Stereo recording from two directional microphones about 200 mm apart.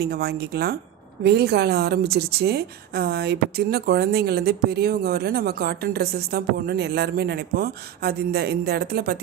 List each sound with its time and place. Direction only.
0.0 s a woman's voice: 50° right (ahead or behind)